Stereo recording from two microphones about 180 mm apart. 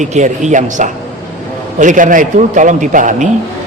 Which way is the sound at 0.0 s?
40° right (ahead or behind).